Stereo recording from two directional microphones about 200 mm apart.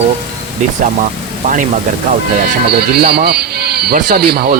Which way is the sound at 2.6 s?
55° right (ahead or behind).